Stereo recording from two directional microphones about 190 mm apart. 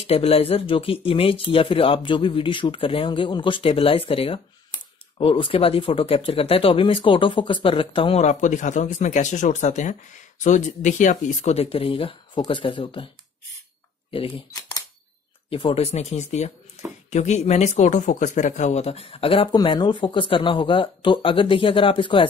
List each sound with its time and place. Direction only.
0.0 s speech: 30° left (ahead or behind)
14.1 s speech: 30° left (ahead or behind)
16.8 s a sound: 35° left (ahead or behind)
17.1 s speech: 35° left (ahead or behind)